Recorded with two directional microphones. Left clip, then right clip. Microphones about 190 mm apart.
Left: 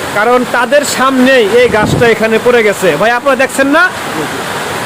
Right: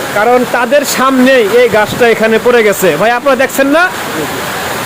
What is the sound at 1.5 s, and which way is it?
Speech, 5° left (ahead or behind).